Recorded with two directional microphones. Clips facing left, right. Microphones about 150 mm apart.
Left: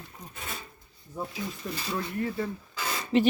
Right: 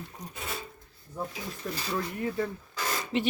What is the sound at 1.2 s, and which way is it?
Speech, centre (ahead or behind).